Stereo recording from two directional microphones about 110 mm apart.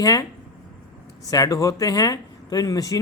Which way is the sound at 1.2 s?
30° left (ahead or behind).